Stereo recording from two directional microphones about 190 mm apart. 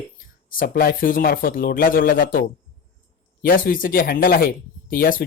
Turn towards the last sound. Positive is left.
turn(degrees=45)  # may be behind; listen again after turning